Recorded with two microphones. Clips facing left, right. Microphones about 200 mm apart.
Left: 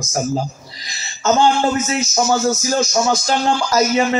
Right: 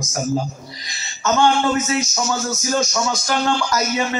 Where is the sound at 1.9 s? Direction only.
30° left (ahead or behind).